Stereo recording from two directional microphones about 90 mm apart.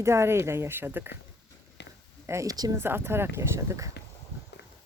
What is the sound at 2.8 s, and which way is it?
Speech, 25° right (ahead or behind).